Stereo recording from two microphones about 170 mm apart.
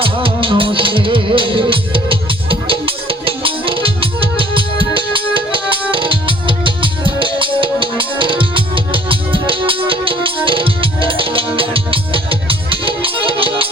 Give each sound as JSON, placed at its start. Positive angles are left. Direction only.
{"t": 0.0, "sound": "music", "side_deg": -30}